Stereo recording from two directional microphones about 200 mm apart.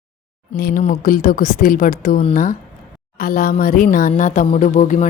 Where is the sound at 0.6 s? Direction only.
45° left (ahead or behind).